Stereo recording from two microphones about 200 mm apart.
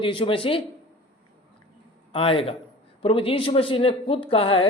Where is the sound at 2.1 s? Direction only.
30° left (ahead or behind).